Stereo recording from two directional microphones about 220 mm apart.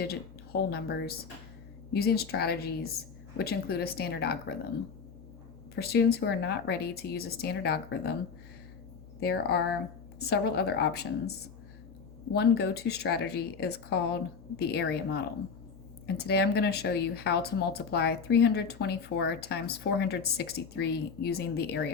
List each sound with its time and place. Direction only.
0.0 s a woman's voice: 45° left (ahead or behind)
5.7 s speech: 45° left (ahead or behind)
9.2 s speech: 45° left (ahead or behind)